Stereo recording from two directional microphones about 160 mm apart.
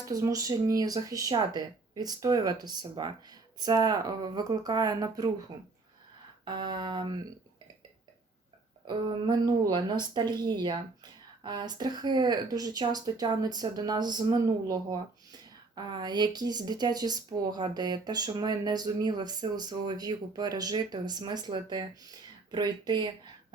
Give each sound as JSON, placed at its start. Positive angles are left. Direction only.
{"t": 0.1, "sound": "speech", "side_deg": -20}
{"t": 8.9, "sound": "speech", "side_deg": -30}